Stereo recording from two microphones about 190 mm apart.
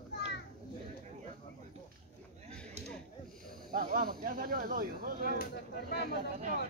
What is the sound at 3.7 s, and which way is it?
Speech, 50° right (ahead or behind).